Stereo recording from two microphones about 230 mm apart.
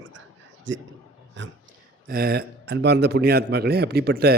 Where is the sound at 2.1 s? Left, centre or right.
Right.